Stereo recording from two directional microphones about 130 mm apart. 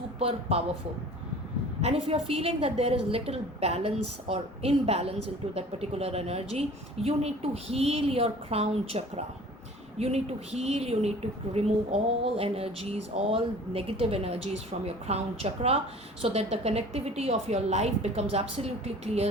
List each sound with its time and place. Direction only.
0.2 s a woman's voice: 50° right (ahead or behind)
1.8 s a woman's voice: 50° right (ahead or behind)